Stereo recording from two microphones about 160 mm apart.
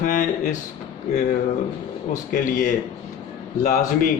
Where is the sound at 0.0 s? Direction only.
55° left (ahead or behind).